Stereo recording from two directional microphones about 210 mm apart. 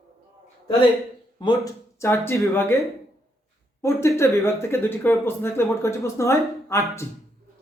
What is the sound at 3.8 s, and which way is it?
Speech, 10° left (ahead or behind).